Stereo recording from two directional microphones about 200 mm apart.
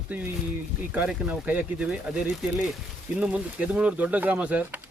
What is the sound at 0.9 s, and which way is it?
Speech, 5° right (ahead or behind).